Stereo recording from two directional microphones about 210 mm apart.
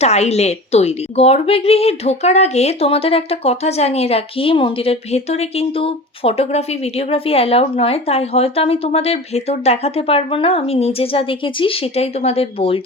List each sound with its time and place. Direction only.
0.0 s a woman's voice: 30° left (ahead or behind)